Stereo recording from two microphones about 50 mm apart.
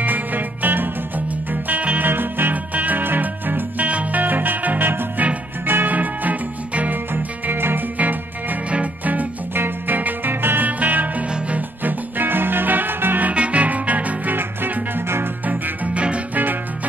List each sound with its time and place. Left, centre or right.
0.0 s music: right
5.9 s music: right
7.4 s music: right
10.8 s music: right
13.3 s music: right
15.4 s music: right